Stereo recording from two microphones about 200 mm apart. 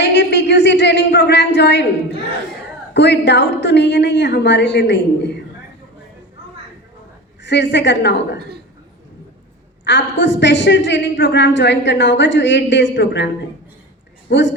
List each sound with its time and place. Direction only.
0.0 s a sound: 60° left (ahead or behind)
2.9 s a woman's voice: 60° left (ahead or behind)
7.4 s a woman's voice: 60° left (ahead or behind)
9.8 s a woman's voice: 60° left (ahead or behind)